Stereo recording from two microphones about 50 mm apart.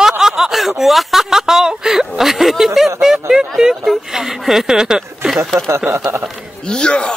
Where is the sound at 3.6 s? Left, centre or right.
Centre.